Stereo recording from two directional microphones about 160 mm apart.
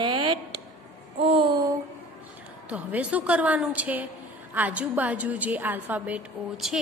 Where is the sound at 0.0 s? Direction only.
30° right (ahead or behind).